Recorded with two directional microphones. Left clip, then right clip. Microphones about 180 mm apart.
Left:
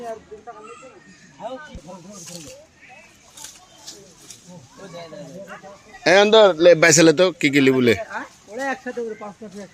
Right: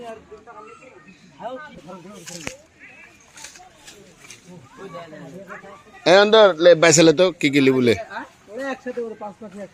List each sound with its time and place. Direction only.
6.0 s a man's voice: 10° left (ahead or behind)
6.9 s a man's voice: centre (ahead or behind)
8.1 s speech: 25° left (ahead or behind)